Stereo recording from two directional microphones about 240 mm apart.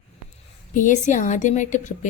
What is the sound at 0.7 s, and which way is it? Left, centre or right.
A woman's voice, left.